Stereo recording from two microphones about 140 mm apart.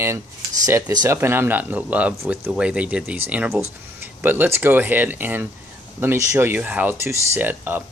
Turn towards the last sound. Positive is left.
turn(degrees=-15)  # may be behind; listen again after turning